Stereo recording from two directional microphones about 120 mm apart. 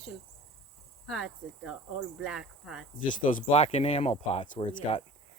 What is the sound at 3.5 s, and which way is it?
Speech, 65° left (ahead or behind).